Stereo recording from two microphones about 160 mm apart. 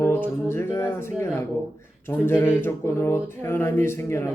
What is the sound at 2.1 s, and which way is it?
Music, 15° left (ahead or behind).